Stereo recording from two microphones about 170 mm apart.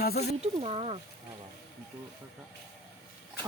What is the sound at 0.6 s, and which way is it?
Speech, 35° right (ahead or behind).